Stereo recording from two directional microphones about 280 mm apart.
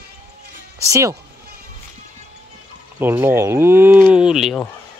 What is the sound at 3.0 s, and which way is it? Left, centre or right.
Speech, centre.